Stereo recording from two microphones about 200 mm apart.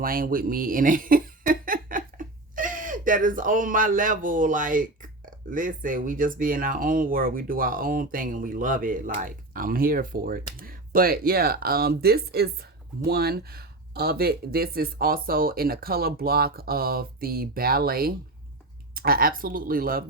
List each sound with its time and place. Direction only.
0.0 s speech: 45° right (ahead or behind)